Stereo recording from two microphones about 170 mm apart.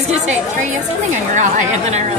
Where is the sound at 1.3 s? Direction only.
45° right (ahead or behind).